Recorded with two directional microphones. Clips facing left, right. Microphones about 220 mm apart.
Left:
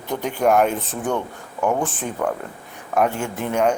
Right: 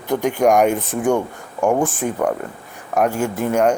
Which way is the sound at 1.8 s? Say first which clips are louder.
Right 4 dB; 10° right (ahead or behind).